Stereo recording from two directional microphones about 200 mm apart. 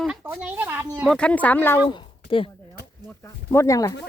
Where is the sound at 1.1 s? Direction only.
5° left (ahead or behind).